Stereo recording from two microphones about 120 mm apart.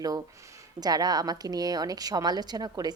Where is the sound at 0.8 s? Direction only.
30° right (ahead or behind).